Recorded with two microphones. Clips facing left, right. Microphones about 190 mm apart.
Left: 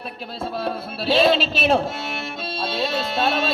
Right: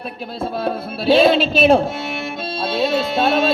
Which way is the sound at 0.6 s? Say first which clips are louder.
Right 6 dB; 55° right (ahead or behind).